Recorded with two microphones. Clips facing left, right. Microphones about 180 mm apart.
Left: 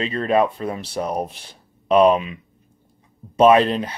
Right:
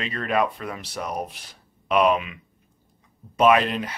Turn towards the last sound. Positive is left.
turn(degrees=30)  # may be behind; listen again after turning